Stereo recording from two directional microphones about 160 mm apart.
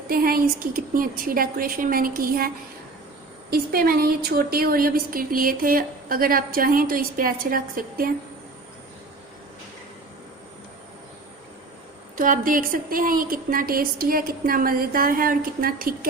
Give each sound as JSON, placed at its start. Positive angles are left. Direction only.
{"t": 0.1, "sound": "a woman's voice", "side_deg": -65}
{"t": 3.5, "sound": "a woman's voice", "side_deg": -70}
{"t": 12.1, "sound": "a woman's voice", "side_deg": -55}